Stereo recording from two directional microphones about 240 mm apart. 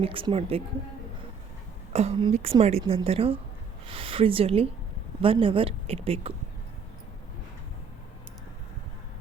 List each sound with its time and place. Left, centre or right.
0.0 s a woman's voice: right
1.9 s a woman's voice: right